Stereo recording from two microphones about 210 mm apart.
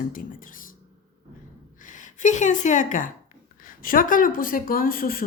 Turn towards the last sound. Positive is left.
turn(degrees=45)  # may be behind; listen again after turning